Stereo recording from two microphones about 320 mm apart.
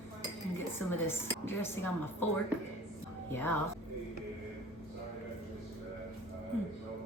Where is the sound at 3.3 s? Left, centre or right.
Centre.